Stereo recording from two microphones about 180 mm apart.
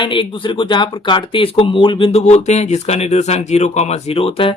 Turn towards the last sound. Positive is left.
turn(degrees=30)  # may be behind; listen again after turning